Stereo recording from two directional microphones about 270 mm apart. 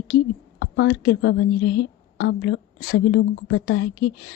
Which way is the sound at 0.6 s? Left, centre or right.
Left.